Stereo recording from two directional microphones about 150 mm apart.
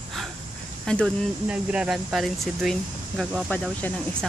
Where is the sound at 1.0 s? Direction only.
5° right (ahead or behind).